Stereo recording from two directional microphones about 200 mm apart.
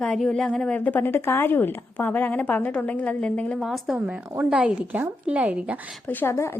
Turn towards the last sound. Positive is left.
turn(degrees=15)  # may be behind; listen again after turning